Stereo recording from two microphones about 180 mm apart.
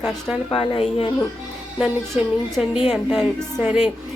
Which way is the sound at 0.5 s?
30° left (ahead or behind).